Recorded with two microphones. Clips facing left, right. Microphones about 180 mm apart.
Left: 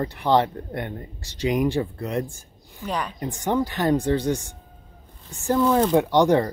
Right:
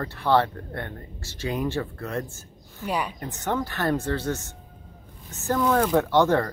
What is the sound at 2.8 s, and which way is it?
Speech, 10° right (ahead or behind).